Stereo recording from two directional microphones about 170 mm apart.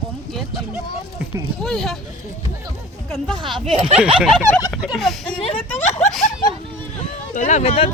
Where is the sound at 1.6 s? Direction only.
5° left (ahead or behind).